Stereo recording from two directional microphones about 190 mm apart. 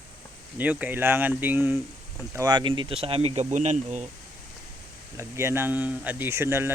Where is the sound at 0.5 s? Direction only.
10° right (ahead or behind).